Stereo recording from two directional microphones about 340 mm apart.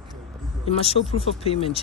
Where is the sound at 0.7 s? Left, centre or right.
Centre.